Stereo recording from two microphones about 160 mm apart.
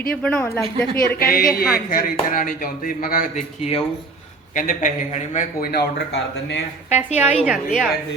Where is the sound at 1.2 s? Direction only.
65° left (ahead or behind).